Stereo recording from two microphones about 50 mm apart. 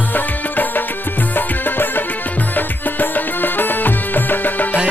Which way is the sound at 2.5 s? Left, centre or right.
Left.